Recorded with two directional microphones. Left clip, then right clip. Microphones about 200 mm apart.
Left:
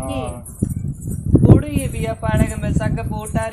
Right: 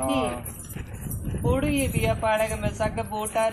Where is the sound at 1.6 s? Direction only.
15° left (ahead or behind).